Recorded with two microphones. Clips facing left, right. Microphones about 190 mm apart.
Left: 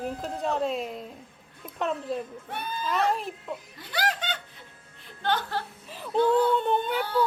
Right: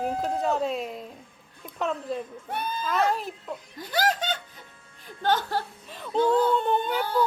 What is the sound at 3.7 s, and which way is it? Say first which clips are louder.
A woman's voice: right 5 dB; 40° right (ahead or behind).